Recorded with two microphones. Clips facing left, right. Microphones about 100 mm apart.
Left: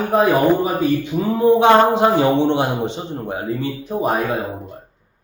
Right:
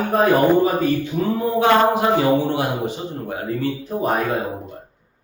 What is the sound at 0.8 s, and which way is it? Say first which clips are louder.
A man's voice: left 1 dB; 15° left (ahead or behind).